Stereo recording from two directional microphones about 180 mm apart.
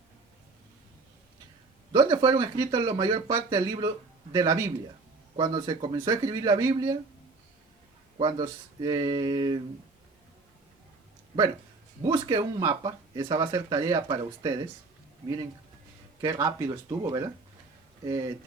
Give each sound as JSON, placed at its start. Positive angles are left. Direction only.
{"t": 1.9, "sound": "speech", "side_deg": -25}
{"t": 8.2, "sound": "speech", "side_deg": -25}
{"t": 12.0, "sound": "speech", "side_deg": -20}
{"t": 16.2, "sound": "speech", "side_deg": -15}